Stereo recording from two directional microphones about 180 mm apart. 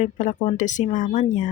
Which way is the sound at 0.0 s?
45° left (ahead or behind).